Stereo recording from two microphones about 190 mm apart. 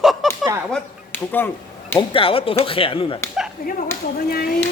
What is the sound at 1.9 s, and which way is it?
A man's voice, 25° left (ahead or behind).